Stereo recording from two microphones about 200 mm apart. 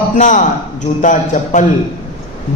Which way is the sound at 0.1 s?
40° left (ahead or behind).